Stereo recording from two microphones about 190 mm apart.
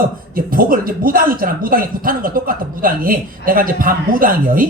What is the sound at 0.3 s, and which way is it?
A man's voice, 50° right (ahead or behind).